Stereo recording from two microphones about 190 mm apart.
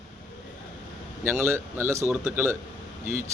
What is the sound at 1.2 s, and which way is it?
Speech, 15° right (ahead or behind).